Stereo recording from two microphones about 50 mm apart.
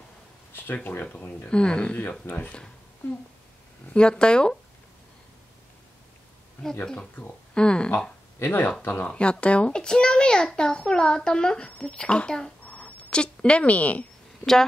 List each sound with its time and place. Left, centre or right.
1.0 s speech: left
1.5 s speech: centre
2.2 s speech: left
3.9 s a child's voice: centre
7.5 s speech: centre
8.5 s speech: left
9.1 s a child's voice: left
12.6 s a sound: left
14.4 s speech: centre